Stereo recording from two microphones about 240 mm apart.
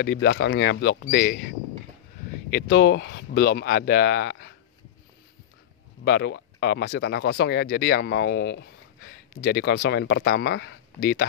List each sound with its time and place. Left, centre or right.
0.0 s speech: left
2.5 s speech: left
6.0 s speech: left